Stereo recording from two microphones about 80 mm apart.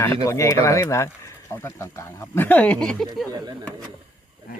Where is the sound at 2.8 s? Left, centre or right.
Centre.